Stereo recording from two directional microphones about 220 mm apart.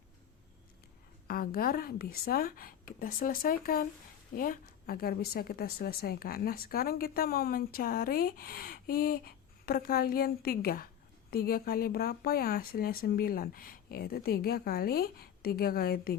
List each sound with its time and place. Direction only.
1.3 s a woman's voice: 40° left (ahead or behind)